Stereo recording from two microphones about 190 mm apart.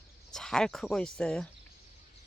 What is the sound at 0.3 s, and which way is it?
Speech, 5° left (ahead or behind).